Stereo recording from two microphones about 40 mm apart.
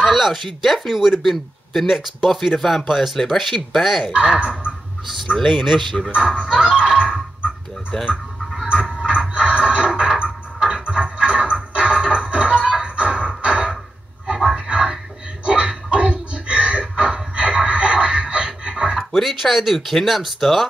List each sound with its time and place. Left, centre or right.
0.1 s speech: centre
4.4 s speech: right
5.4 s speech: centre
6.1 s speech: right
6.8 s a sound: right
9.0 s a sound: right
9.9 s music: right
14.2 s a sound: centre
18.9 s speech: centre